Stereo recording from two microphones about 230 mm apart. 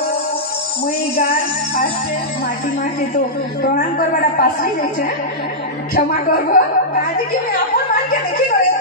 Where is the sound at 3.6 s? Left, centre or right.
Left.